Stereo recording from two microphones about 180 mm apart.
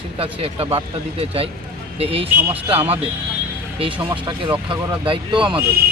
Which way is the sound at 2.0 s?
30° right (ahead or behind).